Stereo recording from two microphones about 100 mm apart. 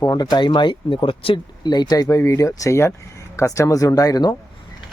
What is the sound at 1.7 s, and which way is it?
Speech, 45° left (ahead or behind).